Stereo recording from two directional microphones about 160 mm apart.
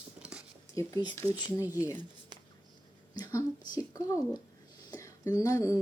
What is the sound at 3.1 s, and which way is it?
Speech, 20° left (ahead or behind).